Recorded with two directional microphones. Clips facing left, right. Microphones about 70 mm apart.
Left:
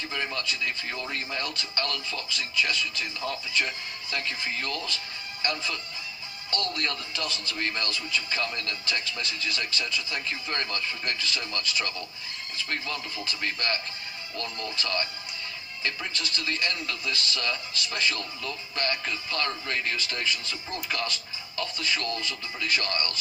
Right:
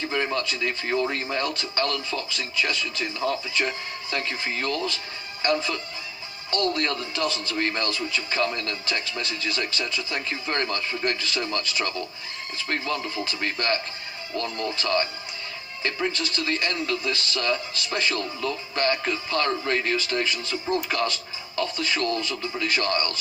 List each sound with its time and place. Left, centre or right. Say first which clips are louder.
0.1 s speech: right 5 dB; right